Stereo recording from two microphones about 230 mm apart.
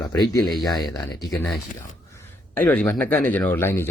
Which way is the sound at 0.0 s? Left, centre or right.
Centre.